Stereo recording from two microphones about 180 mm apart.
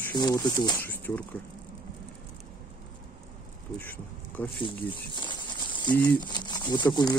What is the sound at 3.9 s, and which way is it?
Speech, 10° left (ahead or behind).